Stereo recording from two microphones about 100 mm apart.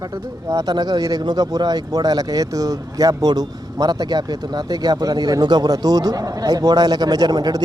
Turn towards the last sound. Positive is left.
turn(degrees=-40)  # may be behind; listen again after turning